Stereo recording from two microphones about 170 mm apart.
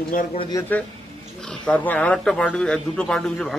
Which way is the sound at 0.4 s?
25° left (ahead or behind).